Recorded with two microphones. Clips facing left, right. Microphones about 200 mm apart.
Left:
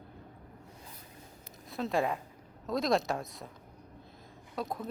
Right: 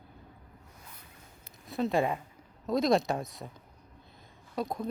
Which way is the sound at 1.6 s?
Centre (ahead or behind).